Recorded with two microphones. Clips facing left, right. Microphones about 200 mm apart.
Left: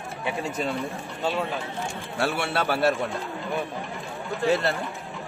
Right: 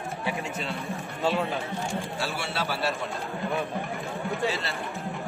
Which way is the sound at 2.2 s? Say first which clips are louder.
Left 5 dB; 60° left (ahead or behind).